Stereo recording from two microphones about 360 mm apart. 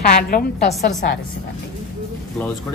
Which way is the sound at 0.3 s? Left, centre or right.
Left.